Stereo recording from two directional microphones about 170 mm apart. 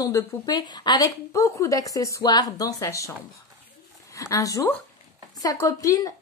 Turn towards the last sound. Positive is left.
turn(degrees=20)  # may be behind; listen again after turning